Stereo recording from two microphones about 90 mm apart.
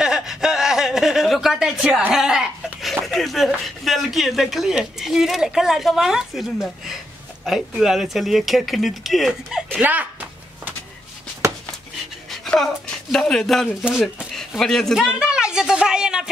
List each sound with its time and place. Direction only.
0.0 s speech: 5° right (ahead or behind)
9.7 s speech: 20° right (ahead or behind)
12.3 s a sound: 5° left (ahead or behind)
13.1 s speech: 5° left (ahead or behind)
15.0 s a woman's voice: 10° right (ahead or behind)